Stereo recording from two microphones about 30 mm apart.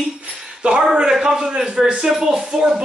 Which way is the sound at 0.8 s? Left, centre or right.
Centre.